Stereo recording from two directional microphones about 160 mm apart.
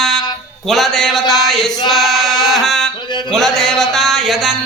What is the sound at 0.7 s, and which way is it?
A man's voice, centre (ahead or behind).